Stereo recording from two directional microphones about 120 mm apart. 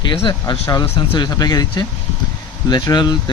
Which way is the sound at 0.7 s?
35° left (ahead or behind).